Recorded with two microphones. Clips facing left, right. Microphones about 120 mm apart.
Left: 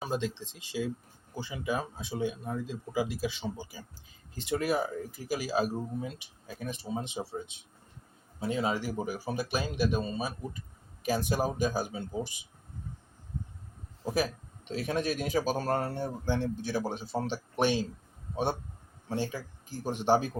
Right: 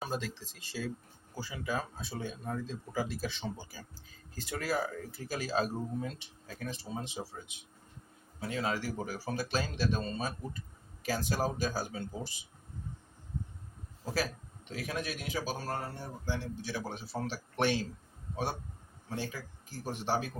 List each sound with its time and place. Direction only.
0.0 s speech: 20° left (ahead or behind)
5.4 s speech: 10° left (ahead or behind)
14.0 s a man's voice: 20° left (ahead or behind)
19.0 s a man's voice: 30° left (ahead or behind)